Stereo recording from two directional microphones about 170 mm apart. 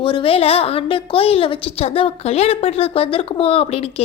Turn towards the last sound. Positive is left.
turn(degrees=35)  # may be behind; listen again after turning